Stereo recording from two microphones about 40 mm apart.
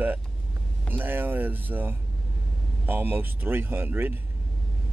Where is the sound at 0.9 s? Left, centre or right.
Right.